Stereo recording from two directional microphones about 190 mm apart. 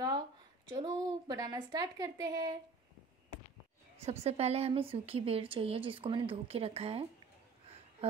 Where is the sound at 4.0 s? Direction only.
35° right (ahead or behind).